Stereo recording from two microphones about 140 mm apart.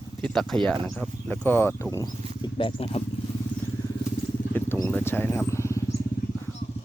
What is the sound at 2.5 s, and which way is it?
Speech, 40° left (ahead or behind).